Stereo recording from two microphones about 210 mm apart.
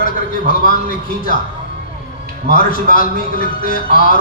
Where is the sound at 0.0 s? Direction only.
40° left (ahead or behind).